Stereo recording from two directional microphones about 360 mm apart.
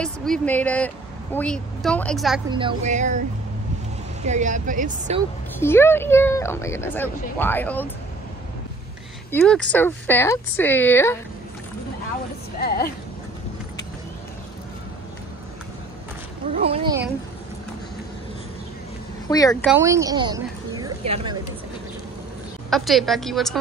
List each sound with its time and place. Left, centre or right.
0.0 s a woman's voice: centre
2.5 s speech: centre
4.2 s speech: centre
5.6 s speech: centre
9.3 s a woman's voice: centre
12.5 s a woman's voice: left
16.6 s speech: centre
19.2 s speech: centre
19.6 s speech: centre
20.7 s a sound: centre
22.7 s a woman's voice: centre